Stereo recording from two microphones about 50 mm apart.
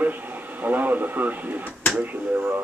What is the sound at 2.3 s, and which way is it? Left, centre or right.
Speech, right.